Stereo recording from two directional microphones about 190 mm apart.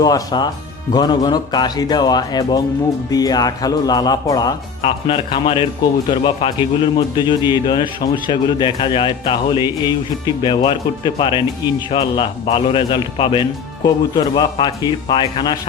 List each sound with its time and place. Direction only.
0.0 s speech: 20° left (ahead or behind)
4.8 s speech: 30° left (ahead or behind)